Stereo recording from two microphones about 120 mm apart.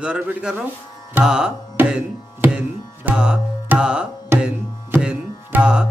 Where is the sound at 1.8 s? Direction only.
15° right (ahead or behind).